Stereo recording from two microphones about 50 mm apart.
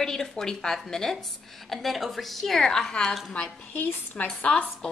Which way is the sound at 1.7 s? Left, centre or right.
Centre.